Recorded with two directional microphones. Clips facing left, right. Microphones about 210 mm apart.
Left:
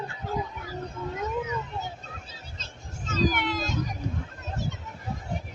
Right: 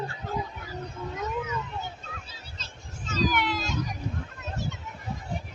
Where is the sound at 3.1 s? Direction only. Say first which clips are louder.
Left 1 dB; 50° left (ahead or behind).